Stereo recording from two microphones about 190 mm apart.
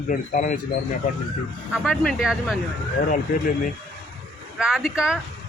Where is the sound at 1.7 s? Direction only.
5° right (ahead or behind).